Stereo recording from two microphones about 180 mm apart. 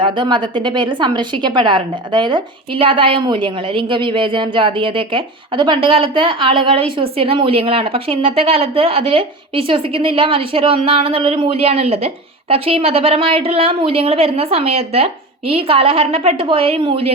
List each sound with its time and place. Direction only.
0.0 s a woman's voice: 25° right (ahead or behind)